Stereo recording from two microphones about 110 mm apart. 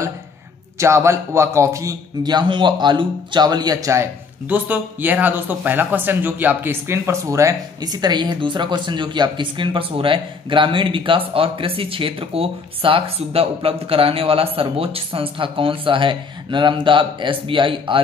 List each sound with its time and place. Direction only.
0.7 s a man's voice: 25° right (ahead or behind)
2.3 s a man's voice: 45° right (ahead or behind); by 7.9 s 30° right (ahead or behind)
7.9 s speech: 40° right (ahead or behind)